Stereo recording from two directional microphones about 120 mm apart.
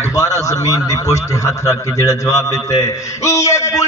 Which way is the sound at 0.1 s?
30° left (ahead or behind).